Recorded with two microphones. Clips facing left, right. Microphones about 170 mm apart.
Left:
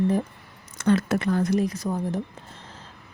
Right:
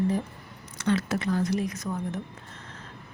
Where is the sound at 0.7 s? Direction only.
50° left (ahead or behind).